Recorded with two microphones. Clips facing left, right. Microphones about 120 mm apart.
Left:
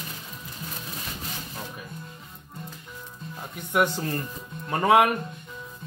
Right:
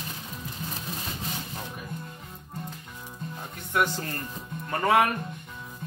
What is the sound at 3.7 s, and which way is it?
A man's voice, 15° left (ahead or behind).